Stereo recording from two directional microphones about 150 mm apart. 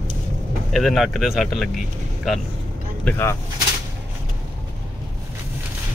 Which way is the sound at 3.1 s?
15° left (ahead or behind).